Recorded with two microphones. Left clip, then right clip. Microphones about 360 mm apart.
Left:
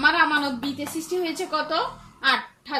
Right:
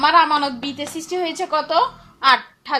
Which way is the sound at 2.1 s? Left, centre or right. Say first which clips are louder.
Right 7 dB; centre.